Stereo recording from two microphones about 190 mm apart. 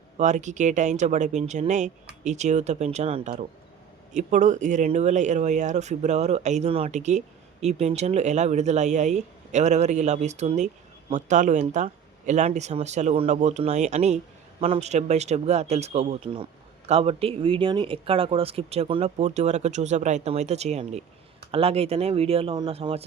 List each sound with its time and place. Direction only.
0.2 s speech: 40° right (ahead or behind)